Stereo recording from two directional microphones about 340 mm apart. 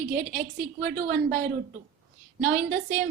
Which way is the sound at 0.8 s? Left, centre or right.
Right.